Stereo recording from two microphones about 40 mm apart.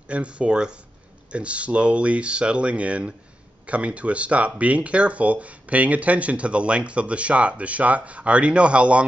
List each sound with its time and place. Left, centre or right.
0.1 s speech: right